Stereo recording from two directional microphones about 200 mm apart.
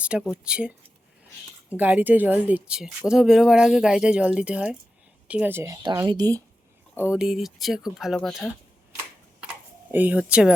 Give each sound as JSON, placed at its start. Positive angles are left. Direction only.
{"t": 0.0, "sound": "speech", "side_deg": -5}
{"t": 1.7, "sound": "speech", "side_deg": -10}
{"t": 7.1, "sound": "speech", "side_deg": -5}
{"t": 9.9, "sound": "speech", "side_deg": -10}